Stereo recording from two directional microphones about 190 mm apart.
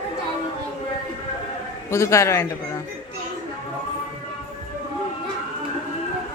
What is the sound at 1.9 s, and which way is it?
Speech, 15° left (ahead or behind).